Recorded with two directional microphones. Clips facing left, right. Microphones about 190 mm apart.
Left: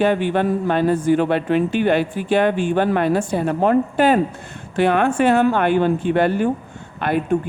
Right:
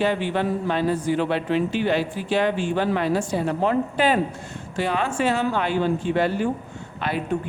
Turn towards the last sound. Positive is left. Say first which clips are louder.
# left 6 dB
turn(degrees=55)  # may be behind; listen again after turning